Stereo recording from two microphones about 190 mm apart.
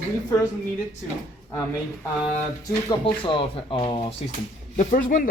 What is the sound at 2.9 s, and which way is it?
Speech, 25° left (ahead or behind).